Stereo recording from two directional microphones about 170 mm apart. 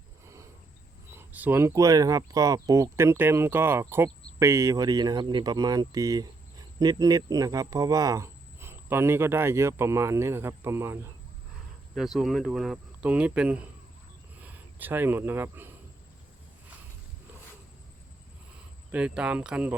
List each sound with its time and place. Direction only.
1.1 s speech: 10° right (ahead or behind)
11.9 s speech: centre (ahead or behind)
18.9 s speech: 10° right (ahead or behind)